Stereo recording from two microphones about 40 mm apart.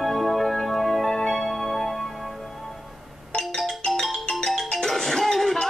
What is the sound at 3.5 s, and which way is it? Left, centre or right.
Music, centre.